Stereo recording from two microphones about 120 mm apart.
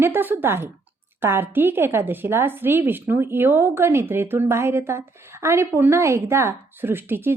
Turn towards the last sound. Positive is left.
turn(degrees=-20)  # may be behind; listen again after turning